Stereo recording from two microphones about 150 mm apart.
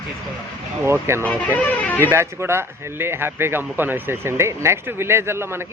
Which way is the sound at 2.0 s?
15° right (ahead or behind).